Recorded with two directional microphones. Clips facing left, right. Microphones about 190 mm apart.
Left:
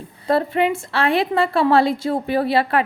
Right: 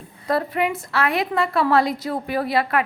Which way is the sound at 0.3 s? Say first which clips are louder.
Left 4 dB; 25° left (ahead or behind).